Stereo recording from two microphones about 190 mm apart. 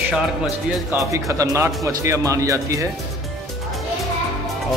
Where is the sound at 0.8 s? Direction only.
15° right (ahead or behind).